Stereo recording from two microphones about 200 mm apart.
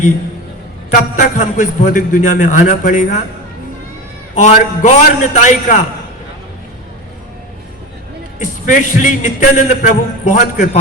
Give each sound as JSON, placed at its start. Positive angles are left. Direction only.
{"t": 0.9, "sound": "a man's voice", "side_deg": 35}
{"t": 4.4, "sound": "a man's voice", "side_deg": 35}
{"t": 8.6, "sound": "a man's voice", "side_deg": 40}